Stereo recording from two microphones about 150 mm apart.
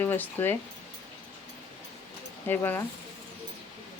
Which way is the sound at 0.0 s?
15° left (ahead or behind).